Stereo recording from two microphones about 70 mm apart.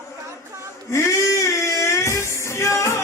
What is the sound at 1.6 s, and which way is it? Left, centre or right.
Music, left.